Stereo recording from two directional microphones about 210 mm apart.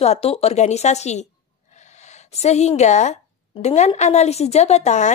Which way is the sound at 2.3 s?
30° left (ahead or behind).